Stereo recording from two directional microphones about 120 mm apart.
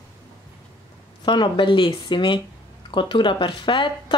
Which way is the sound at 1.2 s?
40° left (ahead or behind).